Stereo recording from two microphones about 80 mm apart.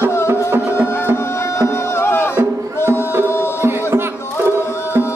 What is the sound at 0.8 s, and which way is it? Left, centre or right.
Music, left.